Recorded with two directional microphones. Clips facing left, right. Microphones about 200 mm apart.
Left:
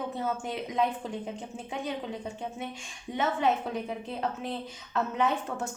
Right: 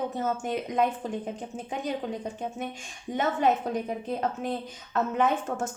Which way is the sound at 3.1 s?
45° right (ahead or behind).